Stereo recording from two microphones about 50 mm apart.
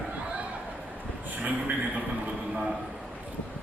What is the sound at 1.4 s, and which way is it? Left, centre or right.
Speech, right.